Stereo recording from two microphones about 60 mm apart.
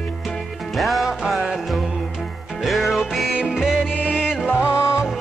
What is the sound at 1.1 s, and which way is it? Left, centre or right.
Music, centre.